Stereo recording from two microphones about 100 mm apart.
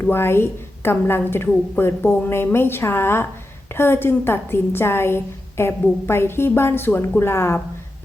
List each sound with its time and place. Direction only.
0.0 s a woman's voice: 25° left (ahead or behind)